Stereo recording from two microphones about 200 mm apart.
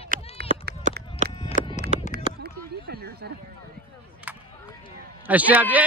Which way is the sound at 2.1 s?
55° right (ahead or behind).